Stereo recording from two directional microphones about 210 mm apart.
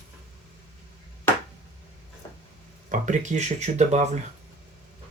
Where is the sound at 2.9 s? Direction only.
35° right (ahead or behind).